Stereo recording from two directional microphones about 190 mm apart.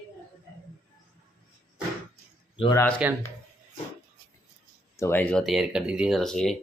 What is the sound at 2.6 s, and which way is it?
Speech, 20° left (ahead or behind).